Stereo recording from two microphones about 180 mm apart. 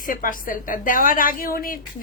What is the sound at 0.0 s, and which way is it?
Speech, 50° left (ahead or behind).